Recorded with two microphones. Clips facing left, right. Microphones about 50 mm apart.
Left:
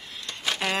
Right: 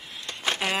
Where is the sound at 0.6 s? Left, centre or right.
Centre.